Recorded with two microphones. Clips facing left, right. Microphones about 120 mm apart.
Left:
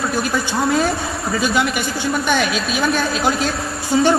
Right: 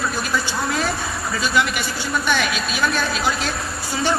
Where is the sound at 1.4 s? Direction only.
50° left (ahead or behind).